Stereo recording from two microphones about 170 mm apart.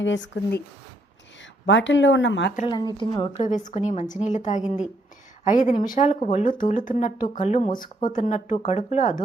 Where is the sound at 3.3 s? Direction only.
45° left (ahead or behind).